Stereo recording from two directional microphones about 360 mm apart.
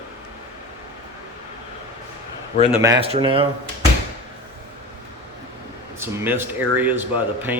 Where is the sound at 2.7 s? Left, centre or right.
Centre.